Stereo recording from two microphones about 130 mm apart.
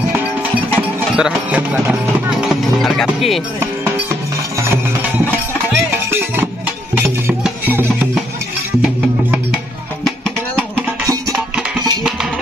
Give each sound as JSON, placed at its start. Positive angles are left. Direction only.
{"t": 1.1, "sound": "music", "side_deg": -10}
{"t": 3.5, "sound": "music", "side_deg": -20}